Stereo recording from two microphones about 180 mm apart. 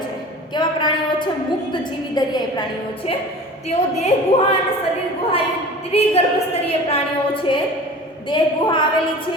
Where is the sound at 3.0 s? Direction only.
35° left (ahead or behind).